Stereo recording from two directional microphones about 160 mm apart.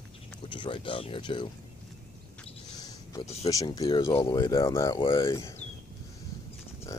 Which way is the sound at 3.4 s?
20° left (ahead or behind).